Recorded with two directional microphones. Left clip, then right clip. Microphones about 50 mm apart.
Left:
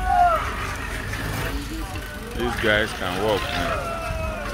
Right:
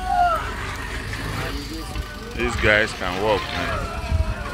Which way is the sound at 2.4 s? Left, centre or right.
Left.